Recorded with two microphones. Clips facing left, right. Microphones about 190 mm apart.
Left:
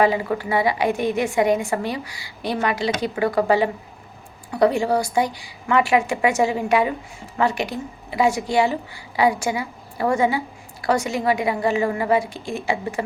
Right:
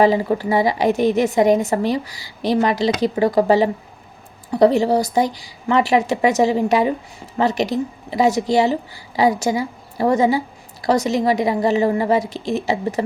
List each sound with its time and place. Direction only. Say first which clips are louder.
0.0 s a woman's voice: right 4 dB; 35° right (ahead or behind)
4.7 s a woman's voice: right 4 dB; 40° right (ahead or behind)